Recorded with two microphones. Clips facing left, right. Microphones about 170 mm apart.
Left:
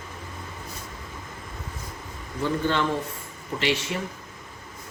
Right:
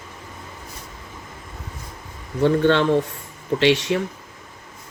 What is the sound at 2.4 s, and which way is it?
A man's voice, 70° right (ahead or behind).